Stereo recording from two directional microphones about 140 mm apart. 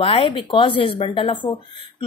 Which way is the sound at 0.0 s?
40° left (ahead or behind).